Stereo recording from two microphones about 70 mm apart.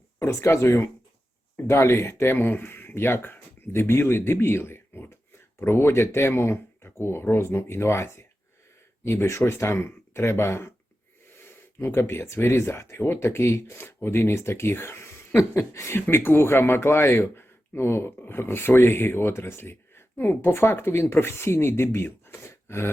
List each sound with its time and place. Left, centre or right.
0.2 s speech: left